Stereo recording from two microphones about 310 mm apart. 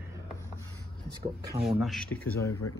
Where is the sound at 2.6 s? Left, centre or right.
Left.